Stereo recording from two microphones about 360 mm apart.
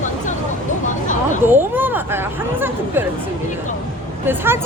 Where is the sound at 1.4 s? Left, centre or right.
Centre.